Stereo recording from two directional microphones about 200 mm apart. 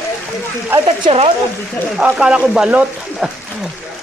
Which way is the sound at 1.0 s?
30° right (ahead or behind).